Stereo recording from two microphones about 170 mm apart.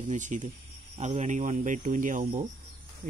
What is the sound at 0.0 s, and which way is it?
Speech, 45° right (ahead or behind).